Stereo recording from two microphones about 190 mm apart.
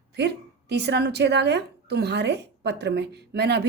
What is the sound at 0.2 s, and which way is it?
A woman's voice, 60° right (ahead or behind).